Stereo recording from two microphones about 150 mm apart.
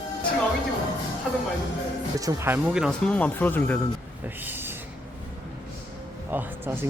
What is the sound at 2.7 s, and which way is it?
Speech, 5° right (ahead or behind).